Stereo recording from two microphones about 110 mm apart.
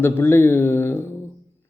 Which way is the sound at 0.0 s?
20° left (ahead or behind).